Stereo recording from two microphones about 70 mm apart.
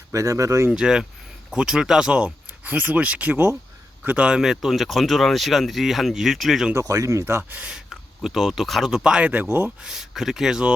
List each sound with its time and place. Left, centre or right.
0.1 s speech: right
0.7 s speech: centre
6.7 s speech: right
7.7 s speech: centre
9.3 s speech: right
9.8 s speech: centre